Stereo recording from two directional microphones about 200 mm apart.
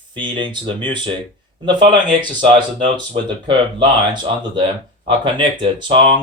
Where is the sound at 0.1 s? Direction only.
25° right (ahead or behind).